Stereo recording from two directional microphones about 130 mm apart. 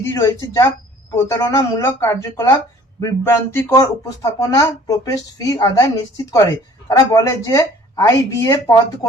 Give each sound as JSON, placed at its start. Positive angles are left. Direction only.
{"t": 0.0, "sound": "a woman's voice", "side_deg": 20}
{"t": 1.9, "sound": "speech", "side_deg": 15}
{"t": 2.2, "sound": "a woman's voice", "side_deg": 25}